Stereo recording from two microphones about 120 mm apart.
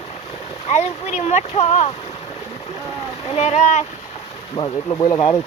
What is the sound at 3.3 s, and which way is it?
Speech, 70° left (ahead or behind).